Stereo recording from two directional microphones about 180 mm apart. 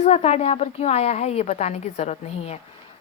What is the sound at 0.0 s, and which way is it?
A woman's voice, 35° left (ahead or behind).